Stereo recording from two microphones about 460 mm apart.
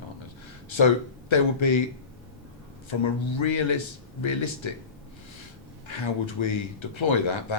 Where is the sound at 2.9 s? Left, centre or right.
Left.